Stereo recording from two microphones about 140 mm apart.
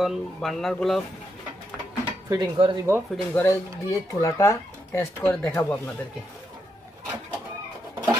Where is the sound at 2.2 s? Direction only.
30° right (ahead or behind).